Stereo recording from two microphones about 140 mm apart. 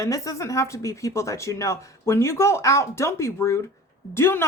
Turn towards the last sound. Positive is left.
turn(degrees=15)  # may be behind; listen again after turning